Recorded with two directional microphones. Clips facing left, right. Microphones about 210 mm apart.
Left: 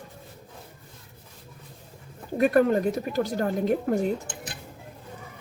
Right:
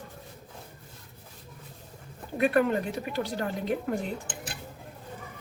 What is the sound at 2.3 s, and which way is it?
Speech, 40° left (ahead or behind).